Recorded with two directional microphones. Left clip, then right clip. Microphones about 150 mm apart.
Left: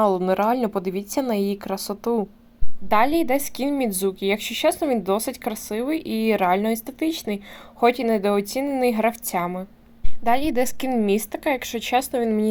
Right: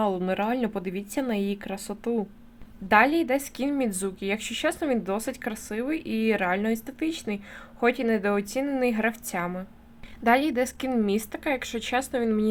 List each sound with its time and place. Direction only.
0.2 s a woman's voice: 15° left (ahead or behind)